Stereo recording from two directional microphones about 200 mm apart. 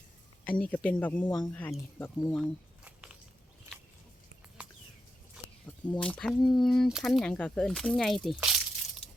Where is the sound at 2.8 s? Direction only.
5° right (ahead or behind).